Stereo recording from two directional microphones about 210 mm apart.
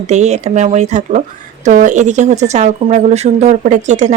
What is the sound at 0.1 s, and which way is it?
Speech, 30° right (ahead or behind).